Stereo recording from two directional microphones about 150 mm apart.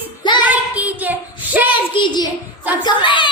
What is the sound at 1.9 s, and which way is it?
A child's voice, 30° left (ahead or behind).